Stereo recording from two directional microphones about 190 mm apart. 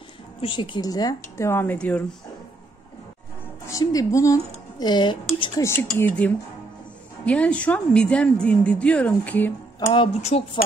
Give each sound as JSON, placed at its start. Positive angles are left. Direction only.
{"t": 0.4, "sound": "speech", "side_deg": 25}
{"t": 3.6, "sound": "speech", "side_deg": 20}
{"t": 5.6, "sound": "speech", "side_deg": 10}
{"t": 9.8, "sound": "speech", "side_deg": 20}
{"t": 10.2, "sound": "speech", "side_deg": 35}